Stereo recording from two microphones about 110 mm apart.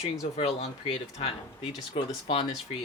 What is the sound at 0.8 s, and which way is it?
Speech, 55° left (ahead or behind).